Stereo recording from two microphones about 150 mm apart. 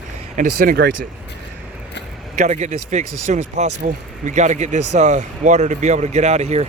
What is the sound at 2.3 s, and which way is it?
Speech, 50° right (ahead or behind).